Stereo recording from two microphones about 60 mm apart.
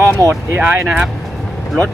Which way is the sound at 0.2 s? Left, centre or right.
Left.